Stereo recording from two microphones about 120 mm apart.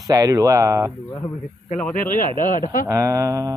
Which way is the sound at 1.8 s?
15° left (ahead or behind).